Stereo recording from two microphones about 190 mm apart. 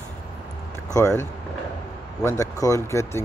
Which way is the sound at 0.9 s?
15° left (ahead or behind).